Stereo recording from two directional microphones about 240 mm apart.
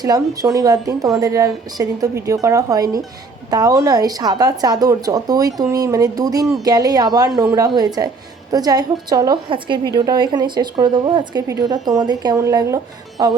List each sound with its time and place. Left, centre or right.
0.0 s speech: centre